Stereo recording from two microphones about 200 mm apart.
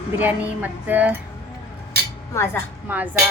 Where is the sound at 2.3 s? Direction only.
15° left (ahead or behind).